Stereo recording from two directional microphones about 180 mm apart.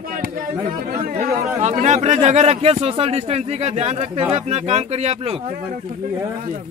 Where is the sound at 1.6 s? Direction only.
40° right (ahead or behind).